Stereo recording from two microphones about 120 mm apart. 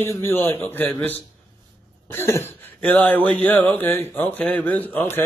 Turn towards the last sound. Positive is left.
turn(degrees=15)  # may be behind; listen again after turning